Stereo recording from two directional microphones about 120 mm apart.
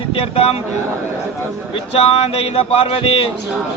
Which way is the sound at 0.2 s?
50° left (ahead or behind).